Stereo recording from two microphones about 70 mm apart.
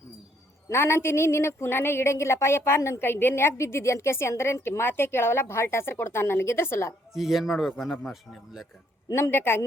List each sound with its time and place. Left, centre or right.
0.7 s a woman's voice: left
7.2 s speech: centre
9.1 s a woman's voice: left